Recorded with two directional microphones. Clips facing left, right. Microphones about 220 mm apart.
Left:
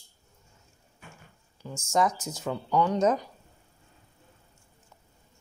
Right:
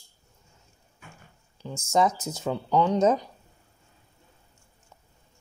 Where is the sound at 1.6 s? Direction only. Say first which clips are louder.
Right 2 dB; 25° right (ahead or behind).